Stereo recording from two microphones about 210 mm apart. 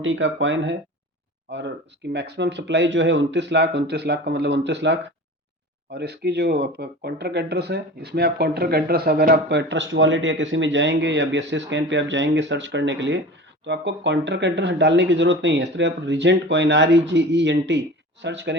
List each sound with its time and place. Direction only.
0.0 s speech: 65° right (ahead or behind)